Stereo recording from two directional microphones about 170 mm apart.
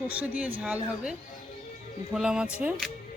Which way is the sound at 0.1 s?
10° right (ahead or behind).